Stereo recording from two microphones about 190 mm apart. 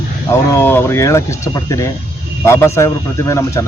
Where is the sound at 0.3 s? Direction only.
15° left (ahead or behind).